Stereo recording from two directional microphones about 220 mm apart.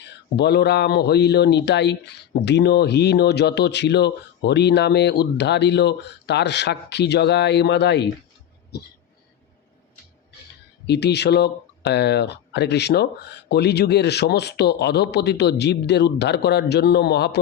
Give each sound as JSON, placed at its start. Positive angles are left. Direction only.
{"t": 0.0, "sound": "speech", "side_deg": 50}
{"t": 10.8, "sound": "speech", "side_deg": 50}